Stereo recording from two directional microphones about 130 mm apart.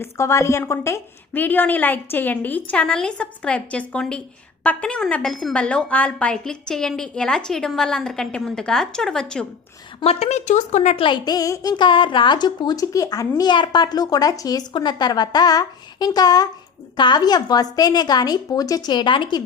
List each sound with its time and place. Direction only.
0.0 s a woman's voice: 20° left (ahead or behind); by 9.5 s 5° left (ahead or behind)
10.0 s a woman's voice: 55° left (ahead or behind)
10.9 s a woman's voice: 40° left (ahead or behind)